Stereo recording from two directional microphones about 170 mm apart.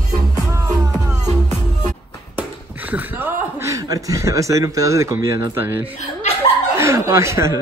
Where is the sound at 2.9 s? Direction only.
15° right (ahead or behind).